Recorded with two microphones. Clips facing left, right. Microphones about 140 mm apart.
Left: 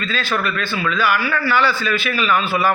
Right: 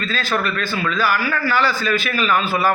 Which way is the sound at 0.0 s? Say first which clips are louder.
Even; 40° right (ahead or behind).